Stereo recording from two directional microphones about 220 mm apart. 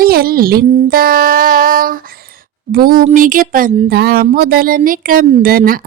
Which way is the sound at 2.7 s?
40° right (ahead or behind).